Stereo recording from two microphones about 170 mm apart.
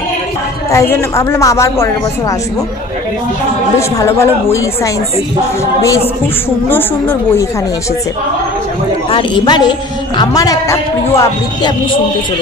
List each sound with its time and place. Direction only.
0.7 s a woman's voice: 15° left (ahead or behind)
4.0 s a woman's voice: 15° left (ahead or behind)
6.7 s a woman's voice: 10° left (ahead or behind)
9.1 s a woman's voice: 30° left (ahead or behind)